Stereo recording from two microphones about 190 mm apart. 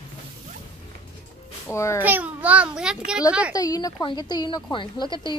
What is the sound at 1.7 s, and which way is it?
Speech, 15° left (ahead or behind).